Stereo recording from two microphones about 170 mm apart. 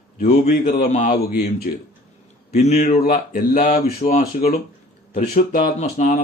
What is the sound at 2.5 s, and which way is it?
Speech, 40° left (ahead or behind).